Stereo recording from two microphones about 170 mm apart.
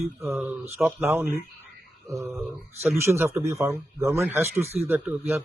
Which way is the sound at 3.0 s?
15° right (ahead or behind).